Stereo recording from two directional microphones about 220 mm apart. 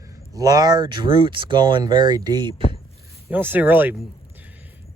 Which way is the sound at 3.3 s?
10° right (ahead or behind).